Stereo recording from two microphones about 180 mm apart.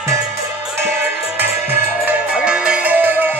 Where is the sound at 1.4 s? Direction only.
10° right (ahead or behind).